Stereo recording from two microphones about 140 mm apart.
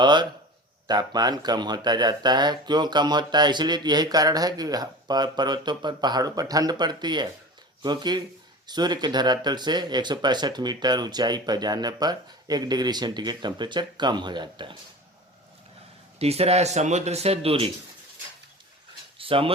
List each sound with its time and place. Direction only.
0.0 s speech: 30° right (ahead or behind)
16.1 s speech: 45° right (ahead or behind)
19.2 s speech: 40° right (ahead or behind)